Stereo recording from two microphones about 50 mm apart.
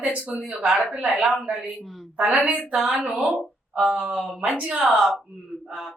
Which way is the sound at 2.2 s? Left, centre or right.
Right.